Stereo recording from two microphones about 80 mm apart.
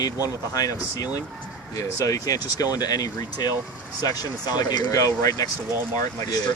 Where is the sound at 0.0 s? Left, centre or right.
Left.